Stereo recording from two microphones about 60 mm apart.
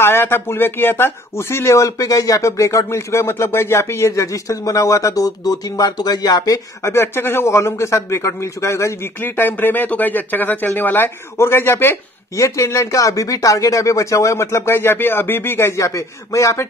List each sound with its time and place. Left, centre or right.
0.0 s a man's voice: left
1.9 s speech: left
4.1 s speech: left
5.5 s speech: left
6.8 s a man's voice: left
9.2 s speech: left
12.4 s speech: left